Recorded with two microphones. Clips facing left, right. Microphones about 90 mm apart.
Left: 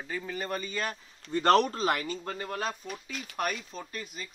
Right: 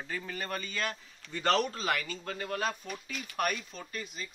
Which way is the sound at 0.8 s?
35° left (ahead or behind).